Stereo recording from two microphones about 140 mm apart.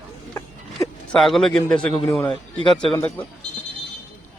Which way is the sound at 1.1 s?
5° left (ahead or behind).